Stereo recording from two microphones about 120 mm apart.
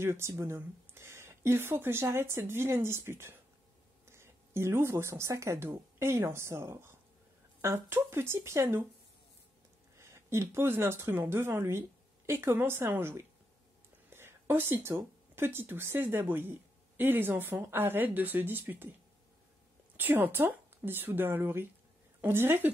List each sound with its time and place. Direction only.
0.0 s speech: 20° right (ahead or behind)
9.9 s speech: 25° right (ahead or behind)
20.0 s speech: 15° right (ahead or behind)